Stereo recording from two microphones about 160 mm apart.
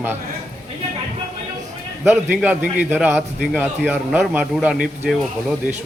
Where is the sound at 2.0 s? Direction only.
10° right (ahead or behind).